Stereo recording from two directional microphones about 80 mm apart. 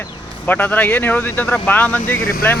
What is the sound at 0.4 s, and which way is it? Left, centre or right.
Speech, left.